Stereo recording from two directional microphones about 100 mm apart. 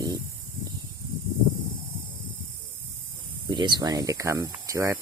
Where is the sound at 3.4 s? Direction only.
50° right (ahead or behind); by 5.0 s 30° right (ahead or behind).